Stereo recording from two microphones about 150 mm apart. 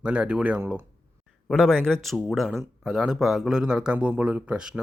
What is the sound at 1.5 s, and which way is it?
Speech, 5° left (ahead or behind).